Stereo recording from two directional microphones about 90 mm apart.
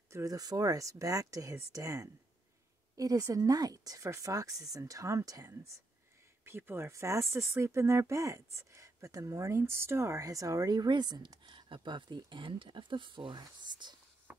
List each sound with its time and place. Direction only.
0.1 s speech: 40° right (ahead or behind)
6.4 s speech: 25° right (ahead or behind); by 13.9 s 55° right (ahead or behind)